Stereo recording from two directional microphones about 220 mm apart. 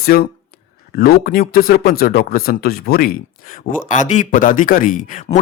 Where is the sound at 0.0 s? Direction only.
45° left (ahead or behind).